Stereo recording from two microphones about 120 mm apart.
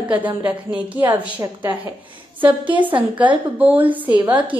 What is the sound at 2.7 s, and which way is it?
Speech, 45° right (ahead or behind).